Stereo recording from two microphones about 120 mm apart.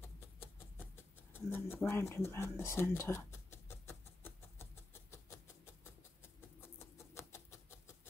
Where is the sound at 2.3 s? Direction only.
20° left (ahead or behind).